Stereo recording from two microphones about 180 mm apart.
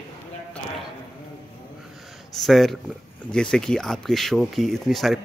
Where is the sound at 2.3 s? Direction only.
Centre (ahead or behind).